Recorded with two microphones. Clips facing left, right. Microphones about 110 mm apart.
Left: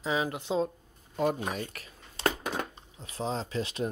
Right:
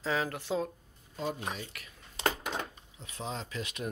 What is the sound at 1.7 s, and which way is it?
Speech, 40° left (ahead or behind).